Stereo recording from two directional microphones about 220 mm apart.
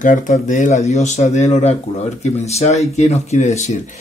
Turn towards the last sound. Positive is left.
turn(degrees=30)  # may be behind; listen again after turning